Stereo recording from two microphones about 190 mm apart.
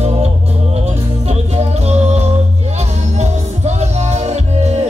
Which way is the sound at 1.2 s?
35° right (ahead or behind).